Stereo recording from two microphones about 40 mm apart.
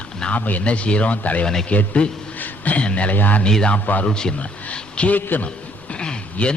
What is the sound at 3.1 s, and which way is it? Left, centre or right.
Speech, left.